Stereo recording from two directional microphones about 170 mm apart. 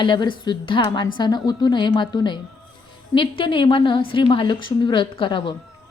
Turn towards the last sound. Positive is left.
turn(degrees=30)  # may be behind; listen again after turning